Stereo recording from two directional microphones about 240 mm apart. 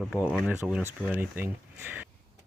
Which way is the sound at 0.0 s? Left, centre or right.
Centre.